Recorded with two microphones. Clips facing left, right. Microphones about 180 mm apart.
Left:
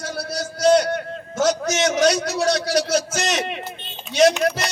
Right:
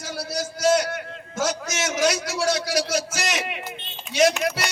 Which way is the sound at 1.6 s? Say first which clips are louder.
Left 5 dB; 35° left (ahead or behind).